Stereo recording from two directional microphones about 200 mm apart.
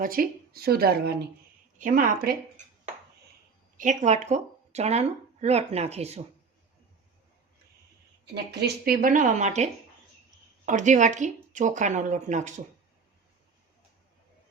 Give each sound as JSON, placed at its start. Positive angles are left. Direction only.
{"t": 0.0, "sound": "speech", "side_deg": -45}
{"t": 3.8, "sound": "speech", "side_deg": -35}
{"t": 8.4, "sound": "speech", "side_deg": -50}
{"t": 10.7, "sound": "speech", "side_deg": -40}